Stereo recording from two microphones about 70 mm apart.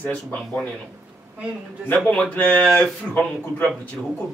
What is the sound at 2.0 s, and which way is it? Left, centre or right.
Speech, left.